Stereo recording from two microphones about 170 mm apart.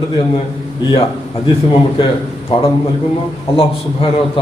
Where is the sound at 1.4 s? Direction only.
25° left (ahead or behind).